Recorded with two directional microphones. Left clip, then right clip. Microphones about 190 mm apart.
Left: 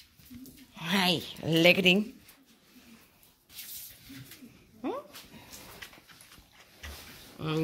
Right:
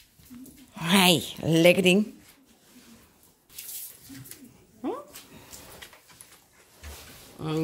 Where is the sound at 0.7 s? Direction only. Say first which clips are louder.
Right 7 dB; 35° right (ahead or behind).